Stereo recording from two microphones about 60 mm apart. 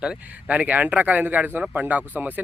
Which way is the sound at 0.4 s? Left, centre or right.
Right.